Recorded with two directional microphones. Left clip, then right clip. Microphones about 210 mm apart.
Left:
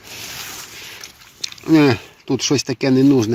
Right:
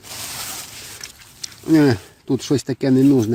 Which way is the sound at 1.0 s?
15° right (ahead or behind).